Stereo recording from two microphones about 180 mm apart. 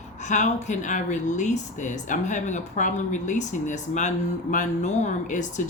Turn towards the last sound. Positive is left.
turn(degrees=45)  # may be behind; listen again after turning